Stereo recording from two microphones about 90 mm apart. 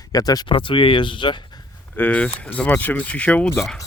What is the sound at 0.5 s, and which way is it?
Speech, 70° left (ahead or behind).